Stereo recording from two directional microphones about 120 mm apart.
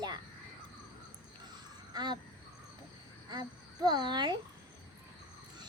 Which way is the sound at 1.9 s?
35° right (ahead or behind).